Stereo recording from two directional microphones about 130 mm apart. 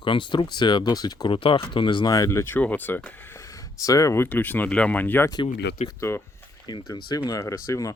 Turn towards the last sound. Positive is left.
turn(degrees=25)  # may be behind; listen again after turning